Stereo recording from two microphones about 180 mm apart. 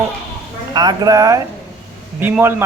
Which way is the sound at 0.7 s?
20° right (ahead or behind).